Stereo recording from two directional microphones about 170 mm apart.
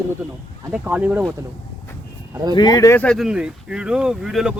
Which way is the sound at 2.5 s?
25° left (ahead or behind).